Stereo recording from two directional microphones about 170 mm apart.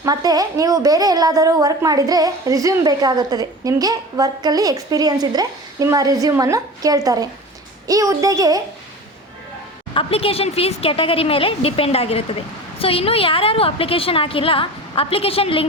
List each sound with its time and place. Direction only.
0.0 s a woman's voice: 20° right (ahead or behind)
9.9 s a woman's voice: 30° left (ahead or behind)